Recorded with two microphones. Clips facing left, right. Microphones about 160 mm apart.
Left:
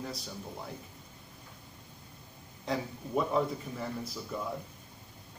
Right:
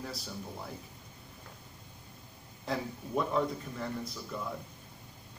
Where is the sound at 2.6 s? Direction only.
Centre (ahead or behind).